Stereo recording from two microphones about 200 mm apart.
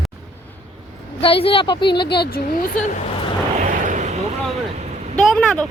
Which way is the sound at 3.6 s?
40° right (ahead or behind).